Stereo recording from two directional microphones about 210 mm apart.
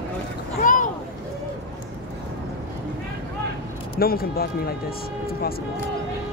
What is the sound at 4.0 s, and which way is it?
Speech, 45° left (ahead or behind).